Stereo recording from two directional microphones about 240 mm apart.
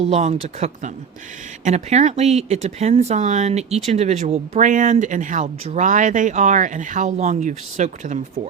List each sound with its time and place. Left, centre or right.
0.1 s speech: right